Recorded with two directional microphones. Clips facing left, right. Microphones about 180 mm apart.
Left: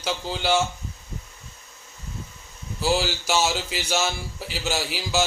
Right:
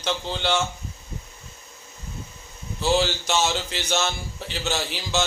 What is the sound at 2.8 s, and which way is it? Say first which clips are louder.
A man's voice: right 2 dB; 5° left (ahead or behind).